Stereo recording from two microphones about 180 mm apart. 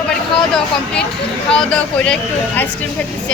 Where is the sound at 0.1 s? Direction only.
5° left (ahead or behind).